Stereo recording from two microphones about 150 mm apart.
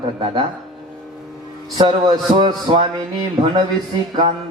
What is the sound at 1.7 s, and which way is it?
Speech, 30° right (ahead or behind).